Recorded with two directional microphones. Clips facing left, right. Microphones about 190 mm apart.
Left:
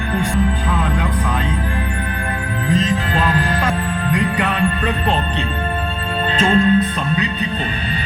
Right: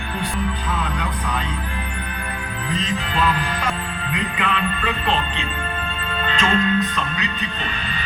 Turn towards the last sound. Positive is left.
turn(degrees=40)  # may be behind; listen again after turning